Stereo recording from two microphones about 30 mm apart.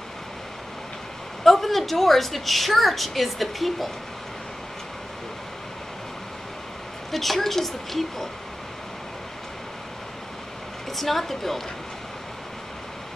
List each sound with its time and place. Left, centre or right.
1.4 s a woman's voice: centre
7.1 s a woman's voice: centre
11.0 s a woman's voice: centre